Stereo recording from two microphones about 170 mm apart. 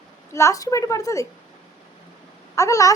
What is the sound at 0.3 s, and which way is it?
Speech, 20° left (ahead or behind).